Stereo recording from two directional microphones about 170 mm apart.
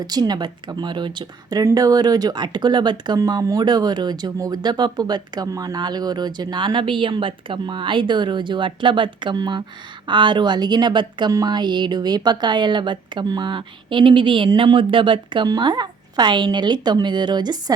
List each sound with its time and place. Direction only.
0.0 s speech: 25° right (ahead or behind)